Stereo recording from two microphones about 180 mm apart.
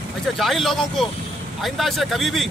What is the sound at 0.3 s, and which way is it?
Speech, centre (ahead or behind).